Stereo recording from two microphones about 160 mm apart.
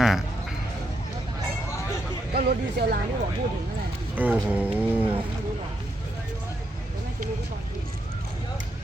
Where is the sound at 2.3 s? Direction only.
75° right (ahead or behind).